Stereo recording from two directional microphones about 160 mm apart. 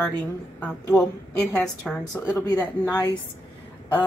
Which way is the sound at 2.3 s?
25° left (ahead or behind).